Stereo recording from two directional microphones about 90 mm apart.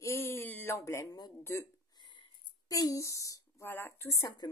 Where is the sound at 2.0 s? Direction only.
60° left (ahead or behind).